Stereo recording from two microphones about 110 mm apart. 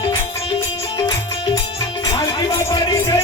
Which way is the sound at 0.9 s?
45° left (ahead or behind).